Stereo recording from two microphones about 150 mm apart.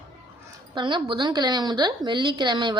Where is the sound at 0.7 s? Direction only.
30° right (ahead or behind).